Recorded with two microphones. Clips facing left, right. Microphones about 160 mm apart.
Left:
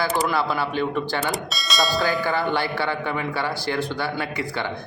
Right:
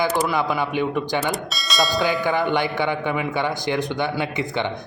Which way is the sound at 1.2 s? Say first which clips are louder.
Right 1 dB; centre (ahead or behind).